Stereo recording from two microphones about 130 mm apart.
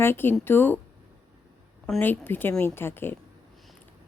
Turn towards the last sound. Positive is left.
turn(degrees=15)  # may be behind; listen again after turning